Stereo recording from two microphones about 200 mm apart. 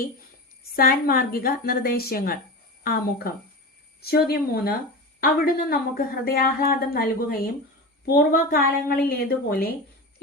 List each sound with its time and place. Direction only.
0.8 s a woman's voice: 45° left (ahead or behind)